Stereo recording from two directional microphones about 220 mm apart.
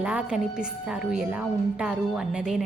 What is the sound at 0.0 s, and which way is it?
Speech, 5° right (ahead or behind).